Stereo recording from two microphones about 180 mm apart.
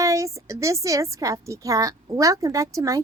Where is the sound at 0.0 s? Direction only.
15° right (ahead or behind).